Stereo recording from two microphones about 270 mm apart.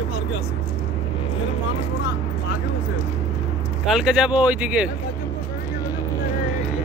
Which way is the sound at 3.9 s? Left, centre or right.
Centre.